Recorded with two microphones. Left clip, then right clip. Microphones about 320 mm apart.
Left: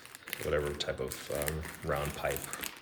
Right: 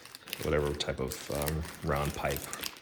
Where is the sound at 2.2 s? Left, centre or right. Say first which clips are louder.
Left 1 dB; centre.